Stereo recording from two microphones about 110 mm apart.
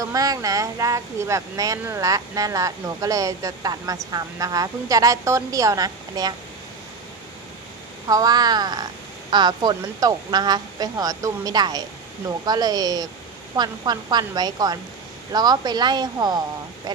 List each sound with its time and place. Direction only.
0.0 s speech: 30° right (ahead or behind)
8.0 s speech: 35° right (ahead or behind)